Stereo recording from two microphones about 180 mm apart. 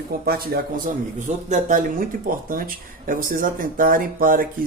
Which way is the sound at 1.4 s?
45° right (ahead or behind).